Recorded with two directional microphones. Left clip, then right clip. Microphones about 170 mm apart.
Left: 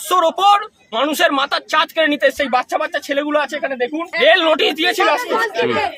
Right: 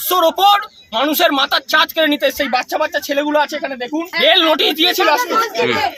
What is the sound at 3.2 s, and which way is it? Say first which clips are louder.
A man's voice: right 2 dB; 10° left (ahead or behind).